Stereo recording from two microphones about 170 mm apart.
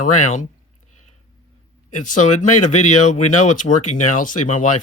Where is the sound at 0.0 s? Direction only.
45° left (ahead or behind).